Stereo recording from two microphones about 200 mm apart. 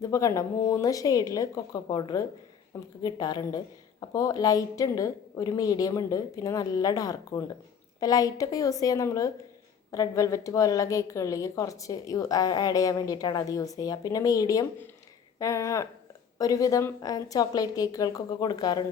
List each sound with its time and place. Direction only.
0.0 s a woman's voice: 15° left (ahead or behind)